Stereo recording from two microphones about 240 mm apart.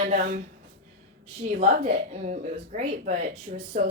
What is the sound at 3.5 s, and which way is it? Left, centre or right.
Speech, right.